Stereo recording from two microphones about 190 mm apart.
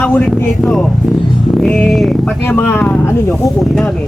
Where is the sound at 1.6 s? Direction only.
5° left (ahead or behind).